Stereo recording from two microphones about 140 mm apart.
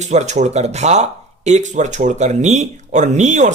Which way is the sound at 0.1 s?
55° right (ahead or behind).